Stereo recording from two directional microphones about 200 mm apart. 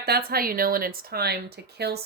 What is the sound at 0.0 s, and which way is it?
Speech, 50° right (ahead or behind).